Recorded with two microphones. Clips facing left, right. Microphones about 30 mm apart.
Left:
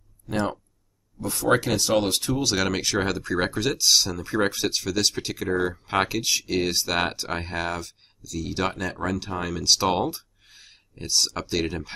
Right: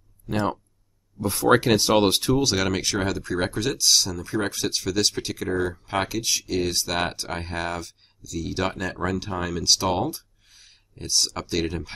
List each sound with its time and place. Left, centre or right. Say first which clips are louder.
0.3 s speech: right 1 dB; centre
1.6 s speech: right 4 dB; right
2.3 s speech: right 2 dB; centre